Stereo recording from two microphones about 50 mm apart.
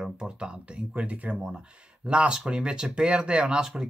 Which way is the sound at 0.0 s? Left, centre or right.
Centre.